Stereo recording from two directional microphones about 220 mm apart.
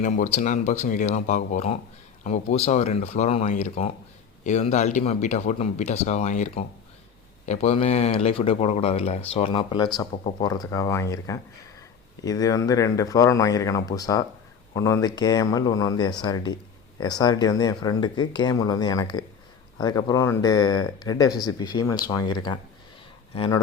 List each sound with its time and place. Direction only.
0.0 s speech: 35° left (ahead or behind); by 22.4 s 20° left (ahead or behind)